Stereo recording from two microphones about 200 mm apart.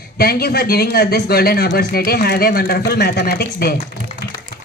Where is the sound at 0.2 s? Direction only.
50° left (ahead or behind).